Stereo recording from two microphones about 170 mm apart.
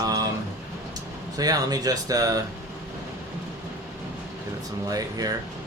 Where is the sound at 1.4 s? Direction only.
20° right (ahead or behind).